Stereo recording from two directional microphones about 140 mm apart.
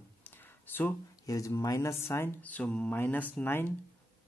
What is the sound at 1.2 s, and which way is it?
Speech, 25° left (ahead or behind).